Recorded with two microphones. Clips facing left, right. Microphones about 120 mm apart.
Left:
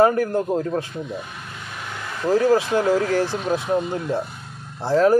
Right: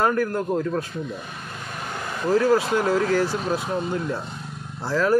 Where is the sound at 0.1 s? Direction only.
30° left (ahead or behind).